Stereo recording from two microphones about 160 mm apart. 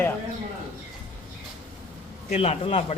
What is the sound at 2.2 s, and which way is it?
Speech, 40° left (ahead or behind).